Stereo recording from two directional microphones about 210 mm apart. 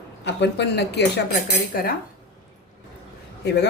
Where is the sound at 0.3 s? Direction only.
55° left (ahead or behind).